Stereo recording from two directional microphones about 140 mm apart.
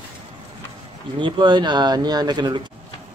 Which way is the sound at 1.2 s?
30° right (ahead or behind).